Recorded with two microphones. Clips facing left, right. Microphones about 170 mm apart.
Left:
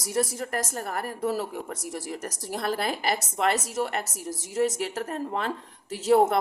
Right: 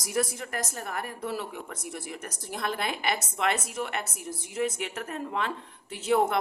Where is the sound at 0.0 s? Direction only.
35° left (ahead or behind).